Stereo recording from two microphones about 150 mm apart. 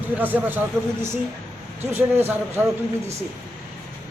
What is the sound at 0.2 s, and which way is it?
A man's voice, 10° right (ahead or behind).